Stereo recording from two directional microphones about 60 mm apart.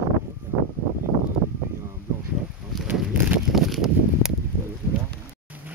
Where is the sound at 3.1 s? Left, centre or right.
Right.